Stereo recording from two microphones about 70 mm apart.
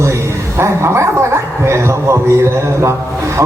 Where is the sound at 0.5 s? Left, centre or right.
Right.